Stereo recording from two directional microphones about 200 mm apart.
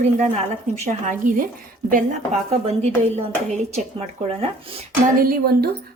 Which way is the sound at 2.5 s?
30° right (ahead or behind).